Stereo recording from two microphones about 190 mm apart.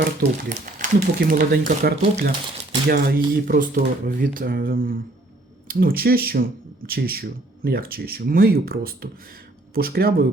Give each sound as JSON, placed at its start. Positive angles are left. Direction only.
{"t": 0.2, "sound": "speech", "side_deg": -50}